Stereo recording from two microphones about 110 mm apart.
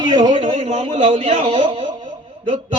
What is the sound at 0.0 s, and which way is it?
A man's voice, 40° right (ahead or behind).